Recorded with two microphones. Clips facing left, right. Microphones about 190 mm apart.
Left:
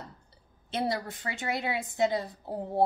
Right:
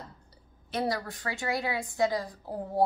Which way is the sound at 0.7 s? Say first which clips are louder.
Even; 25° left (ahead or behind).